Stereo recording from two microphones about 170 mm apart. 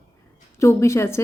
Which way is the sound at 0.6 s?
15° left (ahead or behind).